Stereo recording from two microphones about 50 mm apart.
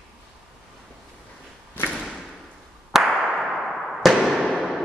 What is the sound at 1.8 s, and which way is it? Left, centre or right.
Thump, left.